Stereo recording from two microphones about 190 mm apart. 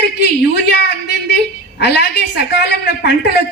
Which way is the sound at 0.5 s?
60° left (ahead or behind).